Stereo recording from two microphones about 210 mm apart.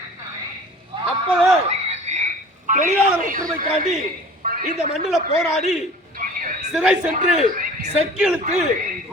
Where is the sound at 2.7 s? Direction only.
40° right (ahead or behind).